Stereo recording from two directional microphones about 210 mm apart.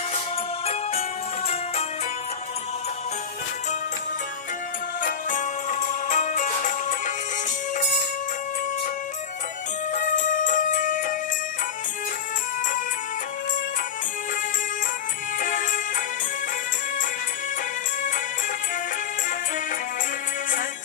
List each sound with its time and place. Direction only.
5.0 s music: 35° left (ahead or behind)
9.9 s music: 35° left (ahead or behind)
15.3 s music: 40° left (ahead or behind)